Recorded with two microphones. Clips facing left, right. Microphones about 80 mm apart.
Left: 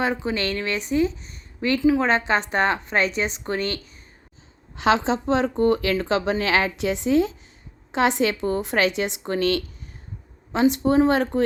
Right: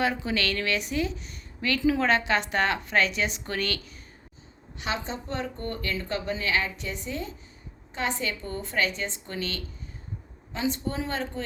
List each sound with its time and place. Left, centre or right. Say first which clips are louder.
0.0 s a woman's voice: left 3 dB; left
1.6 s a woman's voice: left 5 dB; left
2.0 s a woman's voice: left 3 dB; left
4.9 s speech: left 12 dB; left